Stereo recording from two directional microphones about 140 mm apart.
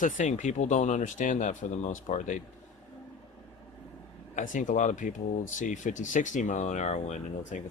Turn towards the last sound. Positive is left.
turn(degrees=55)  # may be behind; listen again after turning